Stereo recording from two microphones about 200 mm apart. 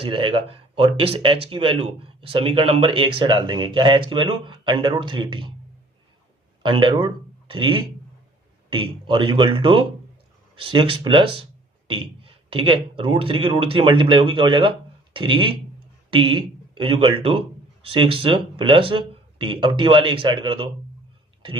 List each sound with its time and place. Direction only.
0.0 s speech: 25° right (ahead or behind)
6.6 s a man's voice: 25° right (ahead or behind)